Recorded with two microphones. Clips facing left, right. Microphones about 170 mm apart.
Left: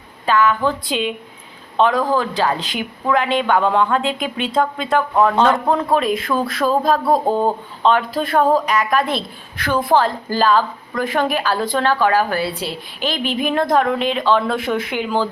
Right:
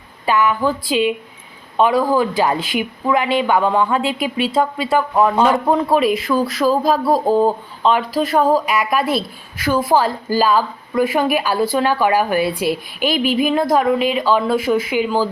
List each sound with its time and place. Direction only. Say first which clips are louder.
0.3 s speech: even; 10° right (ahead or behind)